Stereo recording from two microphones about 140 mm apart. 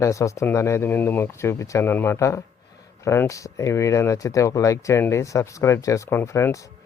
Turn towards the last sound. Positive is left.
turn(degrees=20)  # may be behind; listen again after turning